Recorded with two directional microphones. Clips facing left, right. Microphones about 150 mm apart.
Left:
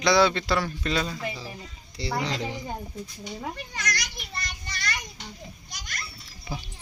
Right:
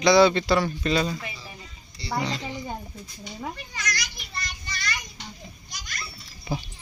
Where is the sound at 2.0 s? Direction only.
90° left.